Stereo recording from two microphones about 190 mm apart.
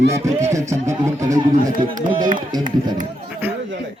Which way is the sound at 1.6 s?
45° right (ahead or behind).